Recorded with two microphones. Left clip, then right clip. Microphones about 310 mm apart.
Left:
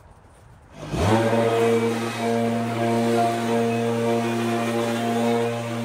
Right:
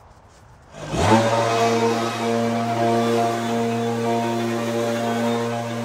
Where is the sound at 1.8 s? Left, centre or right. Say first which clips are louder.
Right 3 dB; centre.